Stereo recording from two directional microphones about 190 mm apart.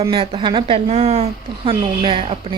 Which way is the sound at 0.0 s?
25° right (ahead or behind).